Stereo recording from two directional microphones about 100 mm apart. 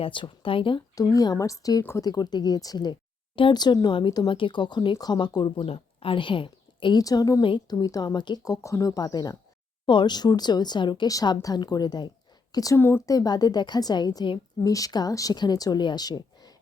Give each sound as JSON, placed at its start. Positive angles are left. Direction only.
{"t": 0.0, "sound": "speech", "side_deg": 60}
{"t": 0.9, "sound": "speech", "side_deg": 40}
{"t": 5.6, "sound": "speech", "side_deg": 75}
{"t": 7.0, "sound": "speech", "side_deg": 40}
{"t": 7.4, "sound": "speech", "side_deg": 50}
{"t": 8.6, "sound": "speech", "side_deg": 35}
{"t": 9.8, "sound": "speech", "side_deg": 55}
{"t": 12.7, "sound": "speech", "side_deg": 25}
{"t": 13.1, "sound": "speech", "side_deg": 40}